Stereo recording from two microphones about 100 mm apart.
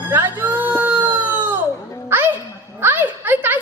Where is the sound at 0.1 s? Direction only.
20° right (ahead or behind).